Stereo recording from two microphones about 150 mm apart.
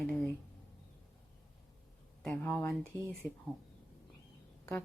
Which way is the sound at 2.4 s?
15° left (ahead or behind).